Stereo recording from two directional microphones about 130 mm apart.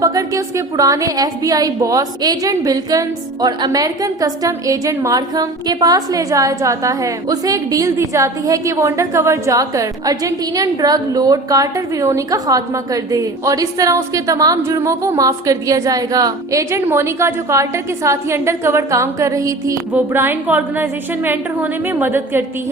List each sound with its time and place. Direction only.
0.0 s a woman's voice: 25° right (ahead or behind)
19.9 s a woman's voice: 15° right (ahead or behind)